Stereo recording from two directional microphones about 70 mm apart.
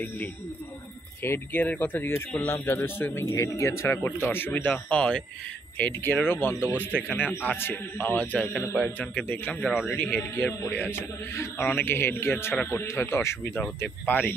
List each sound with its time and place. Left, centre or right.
1.2 s speech: left
1.6 s speech: left
3.3 s a man's voice: left; by 5.2 s centre
5.8 s speech: left
13.7 s speech: left